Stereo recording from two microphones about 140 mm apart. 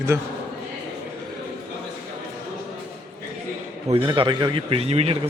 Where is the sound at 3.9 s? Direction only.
40° right (ahead or behind).